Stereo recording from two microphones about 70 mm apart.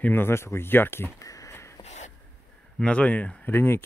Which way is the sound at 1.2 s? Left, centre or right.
Left.